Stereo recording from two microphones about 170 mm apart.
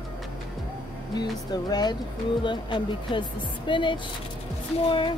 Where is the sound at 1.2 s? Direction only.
25° left (ahead or behind).